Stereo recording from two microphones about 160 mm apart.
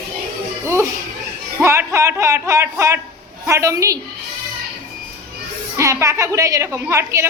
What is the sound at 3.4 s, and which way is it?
Speech, 20° right (ahead or behind).